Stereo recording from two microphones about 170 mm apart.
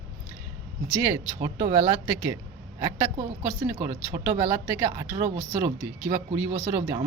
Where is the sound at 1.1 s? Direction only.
20° right (ahead or behind).